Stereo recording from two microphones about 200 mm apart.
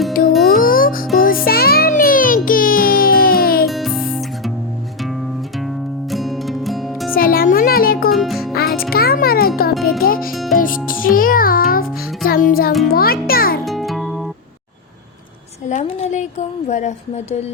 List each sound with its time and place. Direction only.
0.1 s music: 45° left (ahead or behind)
3.7 s music: centre (ahead or behind)
5.6 s music: centre (ahead or behind)
7.1 s music: 45° left (ahead or behind)
8.1 s music: centre (ahead or behind)
8.5 s music: 50° left (ahead or behind)
10.3 s music: centre (ahead or behind)
10.6 s music: 45° left (ahead or behind)
13.7 s music: centre (ahead or behind)
15.7 s a sound: 35° left (ahead or behind)